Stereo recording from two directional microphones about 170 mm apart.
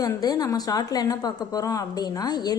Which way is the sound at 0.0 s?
20° left (ahead or behind).